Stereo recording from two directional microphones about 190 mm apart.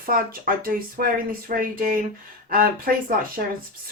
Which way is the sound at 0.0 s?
50° right (ahead or behind).